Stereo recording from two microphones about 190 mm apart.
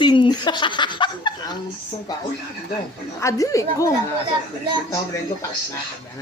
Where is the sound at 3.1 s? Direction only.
15° left (ahead or behind).